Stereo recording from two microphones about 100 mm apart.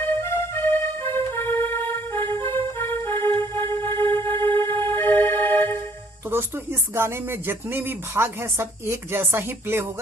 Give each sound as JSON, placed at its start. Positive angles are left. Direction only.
{"t": 0.2, "sound": "music", "side_deg": 25}
{"t": 6.3, "sound": "speech", "side_deg": -25}